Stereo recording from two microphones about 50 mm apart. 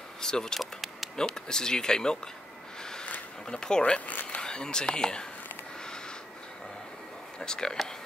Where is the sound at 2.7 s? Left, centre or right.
Centre.